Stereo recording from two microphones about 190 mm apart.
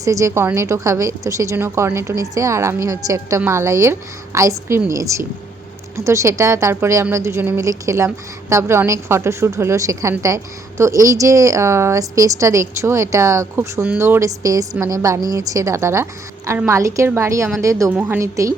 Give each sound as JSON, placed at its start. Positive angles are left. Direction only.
{"t": 0.0, "sound": "a woman's voice", "side_deg": -15}